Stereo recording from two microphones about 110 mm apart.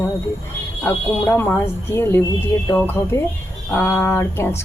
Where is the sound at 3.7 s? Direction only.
20° left (ahead or behind).